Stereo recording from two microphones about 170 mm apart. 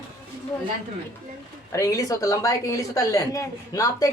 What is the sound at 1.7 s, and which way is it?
A woman's voice, 20° left (ahead or behind).